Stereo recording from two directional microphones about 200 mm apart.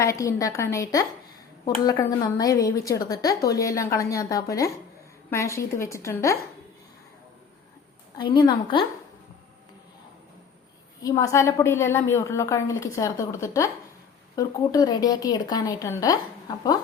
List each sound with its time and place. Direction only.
0.0 s a woman's voice: 15° left (ahead or behind)
8.2 s speech: 25° left (ahead or behind)
11.0 s a woman's voice: 15° left (ahead or behind)